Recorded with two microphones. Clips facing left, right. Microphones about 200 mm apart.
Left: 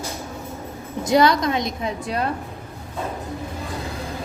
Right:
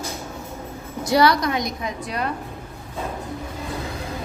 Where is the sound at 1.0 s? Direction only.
20° left (ahead or behind).